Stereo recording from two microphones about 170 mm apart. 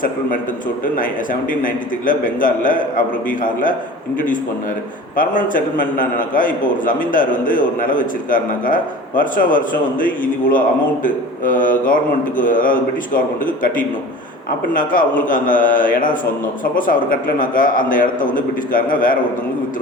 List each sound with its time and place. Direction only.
0.9 s a man's voice: 55° left (ahead or behind)
5.1 s a man's voice: 55° left (ahead or behind)
11.0 s mantra: 55° left (ahead or behind)
12.4 s a man's voice: 55° left (ahead or behind)